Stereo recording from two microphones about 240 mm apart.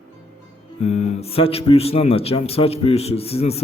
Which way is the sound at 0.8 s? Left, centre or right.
Left.